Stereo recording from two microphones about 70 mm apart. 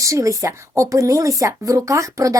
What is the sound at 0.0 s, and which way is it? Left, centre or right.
Speech, right.